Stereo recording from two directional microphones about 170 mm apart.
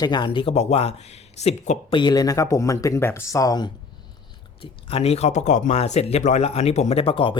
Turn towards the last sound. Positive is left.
turn(degrees=30)  # may be behind; listen again after turning